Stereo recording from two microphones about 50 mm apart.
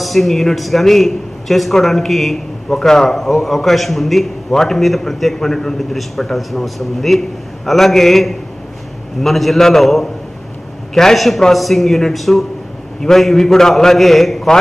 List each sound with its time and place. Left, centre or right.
0.0 s a man's voice: centre